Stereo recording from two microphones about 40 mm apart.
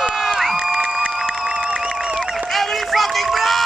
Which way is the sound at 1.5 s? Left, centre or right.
Centre.